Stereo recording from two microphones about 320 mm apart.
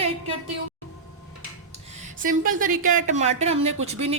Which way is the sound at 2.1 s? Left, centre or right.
Right.